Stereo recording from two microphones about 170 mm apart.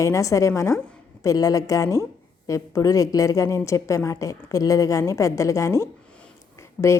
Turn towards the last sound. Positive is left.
turn(degrees=15)  # may be behind; listen again after turning